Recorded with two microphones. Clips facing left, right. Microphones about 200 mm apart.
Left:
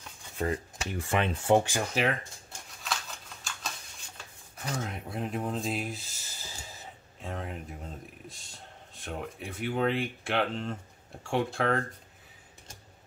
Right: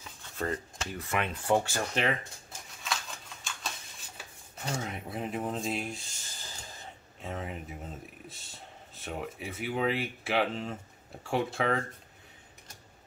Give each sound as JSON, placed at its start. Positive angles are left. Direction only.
{"t": 0.4, "sound": "speech", "side_deg": 15}
{"t": 0.9, "sound": "speech", "side_deg": 30}
{"t": 1.6, "sound": "speech", "side_deg": 15}
{"t": 2.0, "sound": "typewriter", "side_deg": 0}
{"t": 4.7, "sound": "speech", "side_deg": 0}